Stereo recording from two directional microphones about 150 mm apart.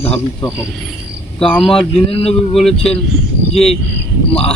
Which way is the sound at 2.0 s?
40° left (ahead or behind).